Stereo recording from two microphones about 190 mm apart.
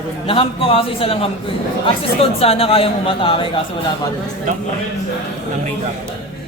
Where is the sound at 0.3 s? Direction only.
30° left (ahead or behind).